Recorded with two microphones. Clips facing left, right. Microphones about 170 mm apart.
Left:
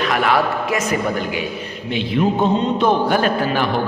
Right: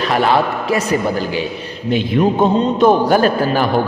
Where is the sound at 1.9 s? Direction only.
45° right (ahead or behind).